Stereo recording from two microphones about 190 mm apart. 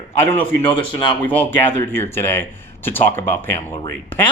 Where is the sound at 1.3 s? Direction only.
10° left (ahead or behind).